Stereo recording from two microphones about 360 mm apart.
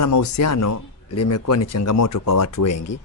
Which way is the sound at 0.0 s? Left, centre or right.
Left.